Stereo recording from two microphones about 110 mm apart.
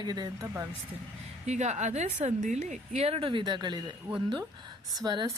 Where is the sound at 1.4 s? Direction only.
90° right.